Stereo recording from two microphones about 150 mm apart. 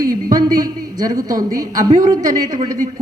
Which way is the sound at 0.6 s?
25° right (ahead or behind).